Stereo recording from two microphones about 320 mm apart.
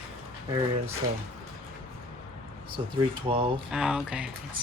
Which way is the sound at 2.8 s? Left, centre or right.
Centre.